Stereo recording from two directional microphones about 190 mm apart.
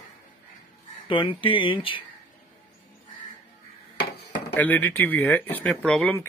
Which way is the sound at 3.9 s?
60° left (ahead or behind).